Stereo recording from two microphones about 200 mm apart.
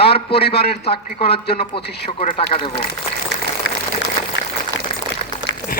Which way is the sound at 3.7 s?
65° left (ahead or behind).